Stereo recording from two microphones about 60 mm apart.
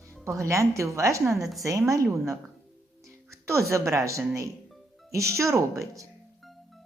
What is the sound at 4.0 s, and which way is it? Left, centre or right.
A woman's voice, right.